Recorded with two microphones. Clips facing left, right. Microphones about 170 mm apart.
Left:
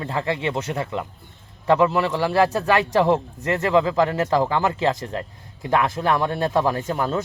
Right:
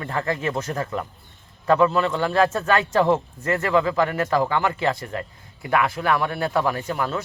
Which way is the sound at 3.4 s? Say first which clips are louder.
Left 2 dB; 20° left (ahead or behind).